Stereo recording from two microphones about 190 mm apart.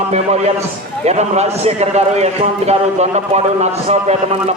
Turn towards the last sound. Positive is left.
turn(degrees=-35)  # may be behind; listen again after turning